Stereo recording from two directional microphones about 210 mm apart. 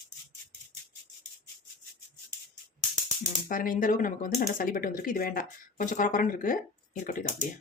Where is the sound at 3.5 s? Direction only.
40° left (ahead or behind).